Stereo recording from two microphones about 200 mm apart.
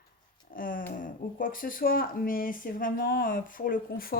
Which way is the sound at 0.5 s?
45° left (ahead or behind).